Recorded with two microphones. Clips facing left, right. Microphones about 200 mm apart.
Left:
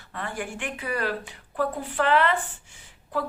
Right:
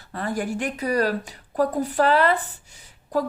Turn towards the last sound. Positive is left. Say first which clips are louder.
# right 5 dB
turn(degrees=-40)  # may be behind; listen again after turning